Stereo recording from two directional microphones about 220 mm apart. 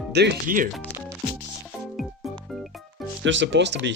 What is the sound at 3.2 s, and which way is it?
Speech, 55° right (ahead or behind).